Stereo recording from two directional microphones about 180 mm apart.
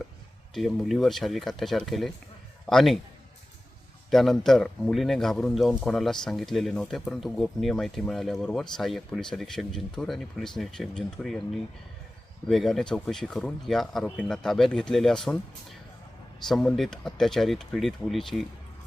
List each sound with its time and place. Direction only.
0.5 s a man's voice: centre (ahead or behind)
4.1 s a man's voice: centre (ahead or behind)